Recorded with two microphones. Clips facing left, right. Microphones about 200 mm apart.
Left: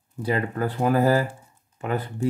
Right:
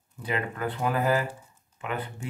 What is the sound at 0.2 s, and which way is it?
Speech, 40° left (ahead or behind).